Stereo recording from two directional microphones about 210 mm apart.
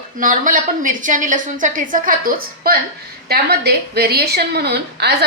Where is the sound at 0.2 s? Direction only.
40° right (ahead or behind).